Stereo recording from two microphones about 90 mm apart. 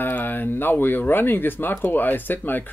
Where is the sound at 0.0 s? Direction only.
20° left (ahead or behind).